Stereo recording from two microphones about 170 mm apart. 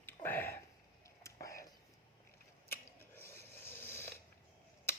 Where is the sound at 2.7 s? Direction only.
15° left (ahead or behind).